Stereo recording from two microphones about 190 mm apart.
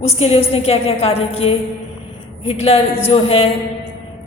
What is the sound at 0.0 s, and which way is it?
A woman's voice, 35° left (ahead or behind).